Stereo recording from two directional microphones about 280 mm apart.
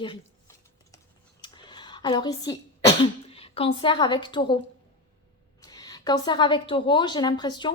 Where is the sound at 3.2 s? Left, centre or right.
Centre.